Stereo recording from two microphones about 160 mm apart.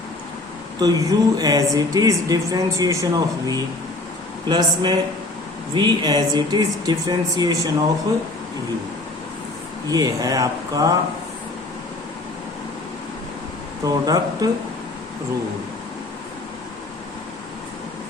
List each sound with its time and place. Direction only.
0.8 s speech: 20° right (ahead or behind)
9.9 s speech: 25° right (ahead or behind)
13.8 s speech: 25° right (ahead or behind)